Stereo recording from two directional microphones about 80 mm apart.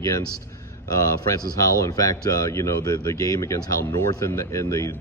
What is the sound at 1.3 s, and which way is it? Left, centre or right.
Speech, left.